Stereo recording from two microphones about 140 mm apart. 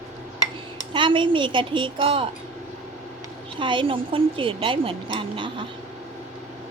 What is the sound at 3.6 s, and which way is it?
Speech, 35° right (ahead or behind).